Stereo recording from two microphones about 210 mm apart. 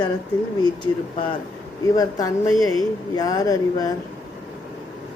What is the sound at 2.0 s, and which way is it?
A woman's voice, 15° left (ahead or behind).